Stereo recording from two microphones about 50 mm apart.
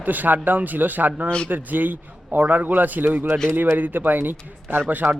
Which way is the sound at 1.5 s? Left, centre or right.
Right.